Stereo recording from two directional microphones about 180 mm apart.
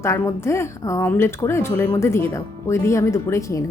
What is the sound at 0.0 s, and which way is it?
A woman's voice, 15° left (ahead or behind).